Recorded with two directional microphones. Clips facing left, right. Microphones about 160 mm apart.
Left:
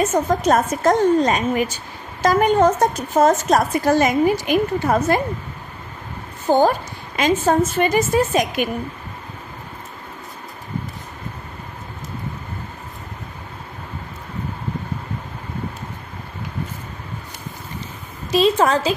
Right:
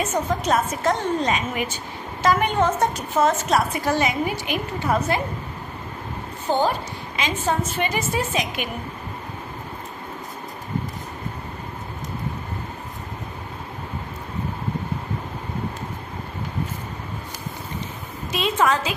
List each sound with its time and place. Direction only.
0.1 s a woman's voice: 45° left (ahead or behind)
6.5 s a woman's voice: 45° left (ahead or behind)
18.3 s a sound: 35° left (ahead or behind)